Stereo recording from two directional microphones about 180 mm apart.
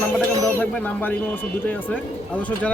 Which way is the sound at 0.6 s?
10° left (ahead or behind).